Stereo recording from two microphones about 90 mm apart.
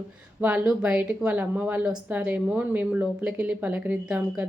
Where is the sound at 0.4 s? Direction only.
15° right (ahead or behind).